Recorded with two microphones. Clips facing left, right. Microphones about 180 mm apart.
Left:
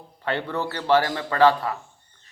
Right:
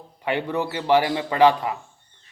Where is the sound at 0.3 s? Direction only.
15° right (ahead or behind).